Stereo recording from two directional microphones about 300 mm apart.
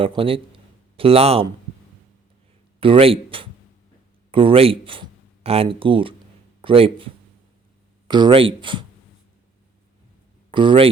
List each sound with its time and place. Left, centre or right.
0.0 s speech: centre
2.8 s speech: centre
8.0 s speech: centre
10.5 s speech: centre